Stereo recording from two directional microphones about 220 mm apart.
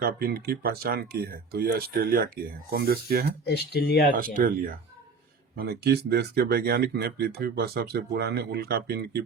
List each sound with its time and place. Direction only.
0.0 s speech: 45° right (ahead or behind)
3.4 s speech: 50° left (ahead or behind)
4.4 s speech: 40° right (ahead or behind)